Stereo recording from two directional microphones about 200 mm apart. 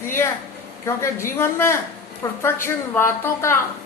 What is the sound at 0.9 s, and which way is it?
A woman's voice, 10° left (ahead or behind).